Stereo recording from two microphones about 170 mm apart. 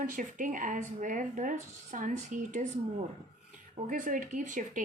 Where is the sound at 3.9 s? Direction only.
50° right (ahead or behind).